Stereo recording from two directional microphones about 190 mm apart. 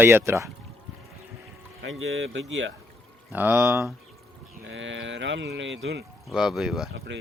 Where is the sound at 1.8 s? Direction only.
85° right.